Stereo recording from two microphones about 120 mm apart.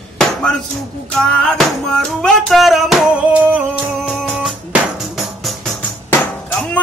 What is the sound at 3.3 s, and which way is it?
Music, 15° right (ahead or behind).